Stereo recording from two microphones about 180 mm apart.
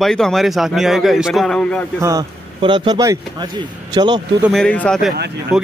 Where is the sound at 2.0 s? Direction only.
15° right (ahead or behind).